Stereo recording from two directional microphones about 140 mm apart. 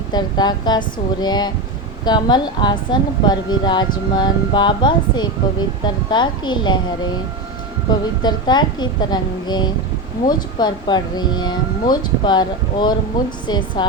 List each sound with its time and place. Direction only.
0.1 s speech: 30° left (ahead or behind)
7.9 s speech: 30° left (ahead or behind)